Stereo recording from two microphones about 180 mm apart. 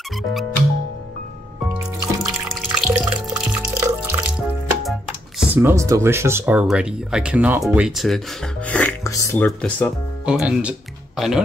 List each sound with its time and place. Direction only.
2.2 s drip: centre (ahead or behind)
5.5 s speech: 15° right (ahead or behind)
8.6 s music: 10° left (ahead or behind)
9.1 s speech: 15° left (ahead or behind)
10.2 s speech: 5° right (ahead or behind)